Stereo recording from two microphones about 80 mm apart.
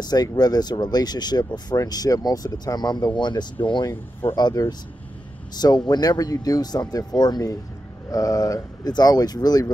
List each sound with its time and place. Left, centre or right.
0.0 s speech: left
1.8 s speech: left
3.2 s speech: left
4.2 s speech: left
5.5 s speech: left